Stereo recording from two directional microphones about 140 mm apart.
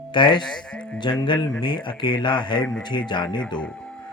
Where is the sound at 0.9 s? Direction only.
30° left (ahead or behind).